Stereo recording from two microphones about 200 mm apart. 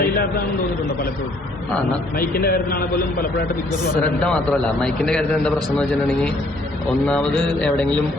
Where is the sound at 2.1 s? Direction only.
50° left (ahead or behind).